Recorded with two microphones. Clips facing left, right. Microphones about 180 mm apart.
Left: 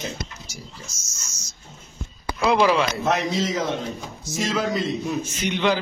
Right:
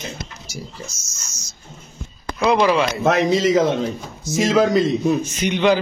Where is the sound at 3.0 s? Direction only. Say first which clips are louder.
Right 6 dB; 90° right.